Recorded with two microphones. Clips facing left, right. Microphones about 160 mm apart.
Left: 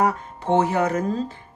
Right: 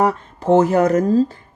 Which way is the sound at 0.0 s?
40° right (ahead or behind).